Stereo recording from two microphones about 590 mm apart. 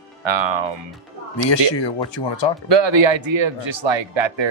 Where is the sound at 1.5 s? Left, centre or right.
Left.